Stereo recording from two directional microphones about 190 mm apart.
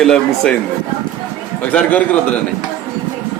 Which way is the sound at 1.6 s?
5° left (ahead or behind).